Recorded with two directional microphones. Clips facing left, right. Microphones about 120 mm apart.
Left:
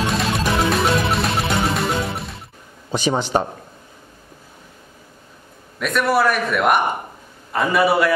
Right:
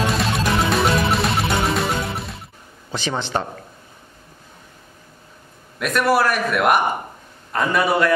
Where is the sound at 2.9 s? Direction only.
15° left (ahead or behind).